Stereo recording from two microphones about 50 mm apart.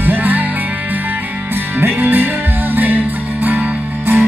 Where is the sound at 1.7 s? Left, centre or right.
Right.